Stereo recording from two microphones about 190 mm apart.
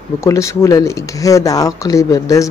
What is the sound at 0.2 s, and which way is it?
Speech, 15° left (ahead or behind).